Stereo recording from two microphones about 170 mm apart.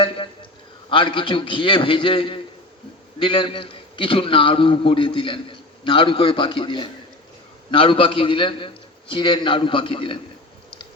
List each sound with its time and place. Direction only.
0.9 s a man's voice: 30° left (ahead or behind)